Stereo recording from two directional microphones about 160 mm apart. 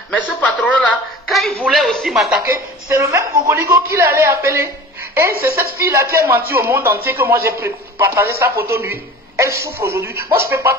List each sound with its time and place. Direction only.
0.1 s speech: 10° left (ahead or behind)
2.4 s a man's voice: 20° right (ahead or behind)
5.3 s a woman's voice: 70° right (ahead or behind)
5.6 s a man's voice: 15° right (ahead or behind)